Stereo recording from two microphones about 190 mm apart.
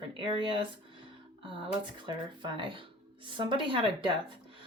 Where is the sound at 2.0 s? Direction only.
25° right (ahead or behind).